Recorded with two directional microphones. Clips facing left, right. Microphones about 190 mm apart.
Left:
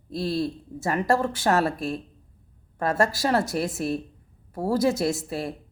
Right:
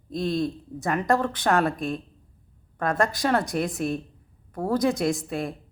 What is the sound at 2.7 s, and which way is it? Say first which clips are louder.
Speech: left 1 dB; 25° left (ahead or behind).